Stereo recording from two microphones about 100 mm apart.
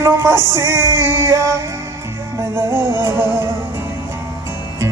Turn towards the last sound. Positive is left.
turn(degrees=-25)  # may be behind; listen again after turning